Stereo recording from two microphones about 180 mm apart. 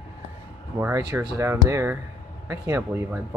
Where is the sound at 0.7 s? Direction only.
15° right (ahead or behind).